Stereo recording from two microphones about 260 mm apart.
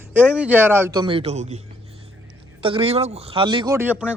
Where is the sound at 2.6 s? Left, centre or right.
Centre.